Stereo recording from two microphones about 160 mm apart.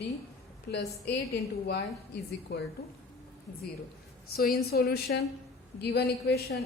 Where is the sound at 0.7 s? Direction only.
90° left.